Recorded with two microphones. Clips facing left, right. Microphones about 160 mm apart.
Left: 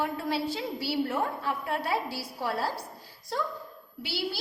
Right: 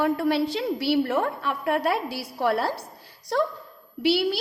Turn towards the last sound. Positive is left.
turn(degrees=-70)  # may be behind; listen again after turning